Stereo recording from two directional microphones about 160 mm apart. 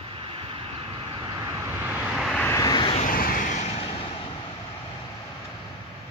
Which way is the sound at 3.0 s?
60° left (ahead or behind).